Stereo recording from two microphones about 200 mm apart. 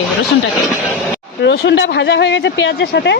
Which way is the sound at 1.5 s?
65° left (ahead or behind).